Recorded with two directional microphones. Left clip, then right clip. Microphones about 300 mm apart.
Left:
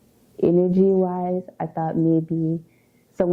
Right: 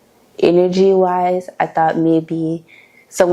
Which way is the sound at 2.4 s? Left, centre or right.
Right.